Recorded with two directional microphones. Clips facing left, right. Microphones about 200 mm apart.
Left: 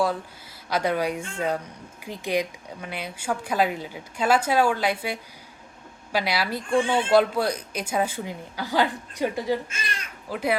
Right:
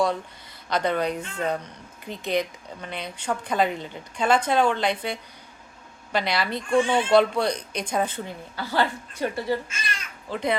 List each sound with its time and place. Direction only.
0.7 s speech: 10° left (ahead or behind)